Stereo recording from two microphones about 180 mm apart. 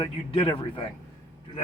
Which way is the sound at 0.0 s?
30° left (ahead or behind).